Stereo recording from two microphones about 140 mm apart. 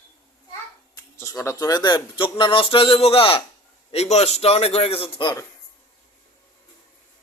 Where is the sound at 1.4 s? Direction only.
25° left (ahead or behind).